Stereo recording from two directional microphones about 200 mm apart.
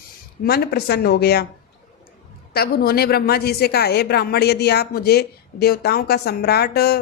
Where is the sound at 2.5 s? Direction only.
50° left (ahead or behind).